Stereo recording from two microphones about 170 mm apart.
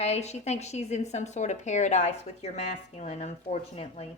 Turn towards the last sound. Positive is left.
turn(degrees=35)  # may be behind; listen again after turning